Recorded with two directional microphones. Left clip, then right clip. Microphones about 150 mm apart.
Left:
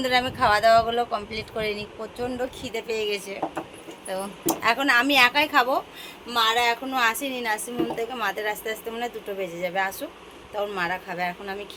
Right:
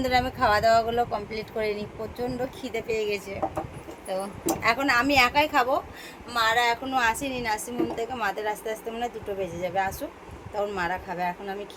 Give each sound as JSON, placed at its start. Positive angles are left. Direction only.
{"t": 0.0, "sound": "a woman's voice", "side_deg": -5}
{"t": 6.3, "sound": "speech", "side_deg": 45}
{"t": 6.8, "sound": "a woman's voice", "side_deg": 5}